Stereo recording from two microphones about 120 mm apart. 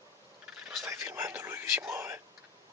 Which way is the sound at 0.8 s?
20° right (ahead or behind).